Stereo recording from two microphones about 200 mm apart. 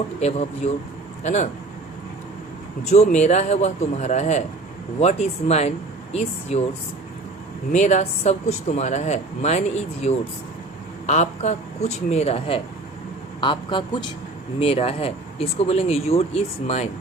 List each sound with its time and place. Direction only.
0.2 s speech: 35° left (ahead or behind)
2.9 s speech: 35° left (ahead or behind)
7.7 s speech: 35° left (ahead or behind)